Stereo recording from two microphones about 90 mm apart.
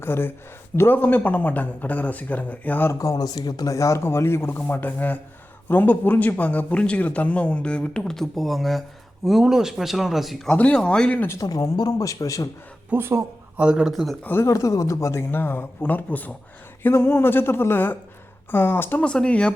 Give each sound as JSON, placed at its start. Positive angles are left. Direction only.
{"t": 0.0, "sound": "speech", "side_deg": 25}
{"t": 3.0, "sound": "speech", "side_deg": 45}
{"t": 11.3, "sound": "speech", "side_deg": 45}
{"t": 12.9, "sound": "speech", "side_deg": -25}
{"t": 13.6, "sound": "speech", "side_deg": -10}
{"t": 14.4, "sound": "speech", "side_deg": 35}
{"t": 19.0, "sound": "speech", "side_deg": 10}